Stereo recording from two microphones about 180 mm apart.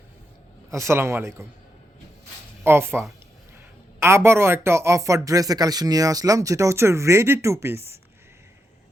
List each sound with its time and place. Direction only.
0.7 s a man's voice: 15° right (ahead or behind)
2.6 s a man's voice: 15° right (ahead or behind)